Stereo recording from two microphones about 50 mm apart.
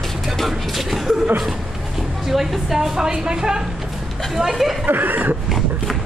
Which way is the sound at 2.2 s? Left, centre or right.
Centre.